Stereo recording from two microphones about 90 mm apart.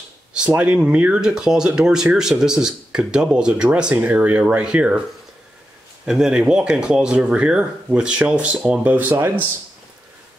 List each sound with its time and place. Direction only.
0.3 s speech: 15° right (ahead or behind)
6.0 s speech: 5° right (ahead or behind); by 9.4 s 25° right (ahead or behind)